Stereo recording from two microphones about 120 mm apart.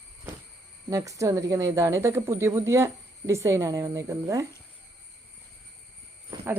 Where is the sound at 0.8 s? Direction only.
25° right (ahead or behind).